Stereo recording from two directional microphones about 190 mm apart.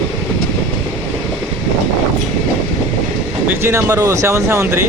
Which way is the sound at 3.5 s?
15° right (ahead or behind).